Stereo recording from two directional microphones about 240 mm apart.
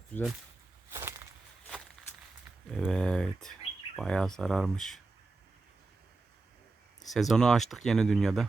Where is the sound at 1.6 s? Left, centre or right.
Centre.